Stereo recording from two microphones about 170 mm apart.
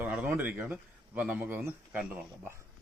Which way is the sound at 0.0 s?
10° right (ahead or behind).